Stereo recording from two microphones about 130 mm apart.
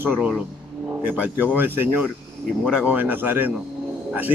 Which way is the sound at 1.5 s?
15° right (ahead or behind).